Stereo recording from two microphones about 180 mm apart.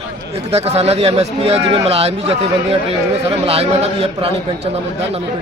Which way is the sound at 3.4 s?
35° right (ahead or behind).